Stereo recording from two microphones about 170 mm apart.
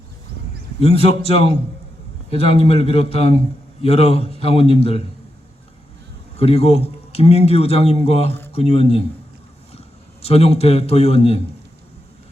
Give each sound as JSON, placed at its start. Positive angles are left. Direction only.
{"t": 0.8, "sound": "a man's voice", "side_deg": 35}
{"t": 6.3, "sound": "a man's voice", "side_deg": 35}
{"t": 10.2, "sound": "a man's voice", "side_deg": 35}